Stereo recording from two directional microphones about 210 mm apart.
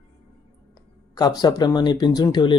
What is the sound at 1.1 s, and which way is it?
A man's voice, 20° left (ahead or behind).